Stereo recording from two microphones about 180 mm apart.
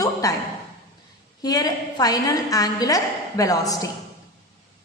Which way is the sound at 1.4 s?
20° left (ahead or behind).